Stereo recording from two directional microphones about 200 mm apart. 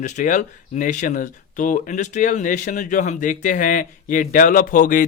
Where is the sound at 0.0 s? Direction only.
40° left (ahead or behind).